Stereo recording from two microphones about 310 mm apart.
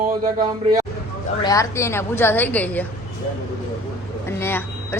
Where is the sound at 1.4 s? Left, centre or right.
Centre.